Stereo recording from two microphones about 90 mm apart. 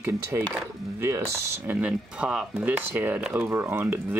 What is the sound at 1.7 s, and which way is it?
Speech, 15° right (ahead or behind).